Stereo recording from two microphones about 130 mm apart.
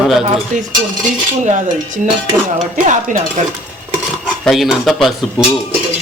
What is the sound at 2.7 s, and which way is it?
Cutlery, 75° right (ahead or behind).